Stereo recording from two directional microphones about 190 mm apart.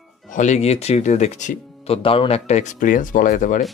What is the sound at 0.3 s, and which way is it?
Speech, 40° left (ahead or behind).